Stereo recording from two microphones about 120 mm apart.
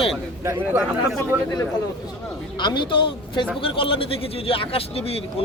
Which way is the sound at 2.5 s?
40° left (ahead or behind).